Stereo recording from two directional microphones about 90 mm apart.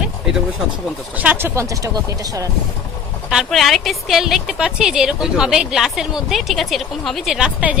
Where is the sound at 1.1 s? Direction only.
15° right (ahead or behind).